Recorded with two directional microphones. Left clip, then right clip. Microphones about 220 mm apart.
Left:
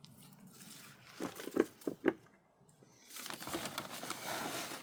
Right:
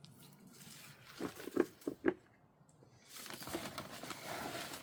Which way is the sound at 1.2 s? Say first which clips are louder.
Left 2 dB; 40° left (ahead or behind).